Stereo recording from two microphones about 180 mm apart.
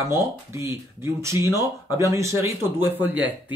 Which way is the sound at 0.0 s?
15° right (ahead or behind).